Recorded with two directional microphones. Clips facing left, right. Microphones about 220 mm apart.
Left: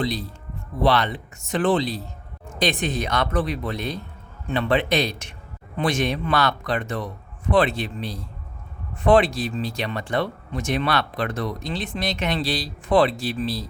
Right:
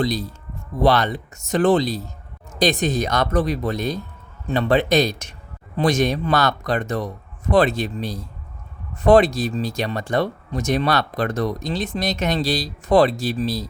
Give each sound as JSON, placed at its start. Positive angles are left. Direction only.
{"t": 0.0, "sound": "speech", "side_deg": -40}